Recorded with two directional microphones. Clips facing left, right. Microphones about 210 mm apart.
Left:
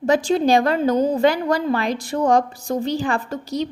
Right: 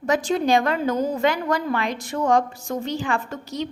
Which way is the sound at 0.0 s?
30° left (ahead or behind).